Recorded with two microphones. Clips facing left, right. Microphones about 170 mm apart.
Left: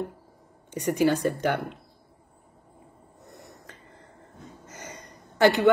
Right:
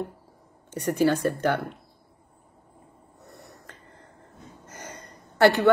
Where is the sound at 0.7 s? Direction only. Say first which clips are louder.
Even; 15° left (ahead or behind).